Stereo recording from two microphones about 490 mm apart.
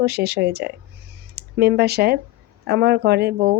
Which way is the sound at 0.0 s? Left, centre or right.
Centre.